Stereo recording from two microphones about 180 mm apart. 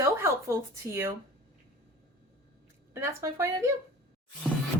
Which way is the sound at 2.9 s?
15° right (ahead or behind).